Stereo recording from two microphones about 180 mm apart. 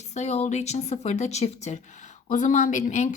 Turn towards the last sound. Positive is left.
turn(degrees=45)  # may be behind; listen again after turning